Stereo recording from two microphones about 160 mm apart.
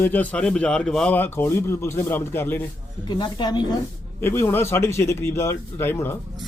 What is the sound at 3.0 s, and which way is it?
Speech, 25° left (ahead or behind).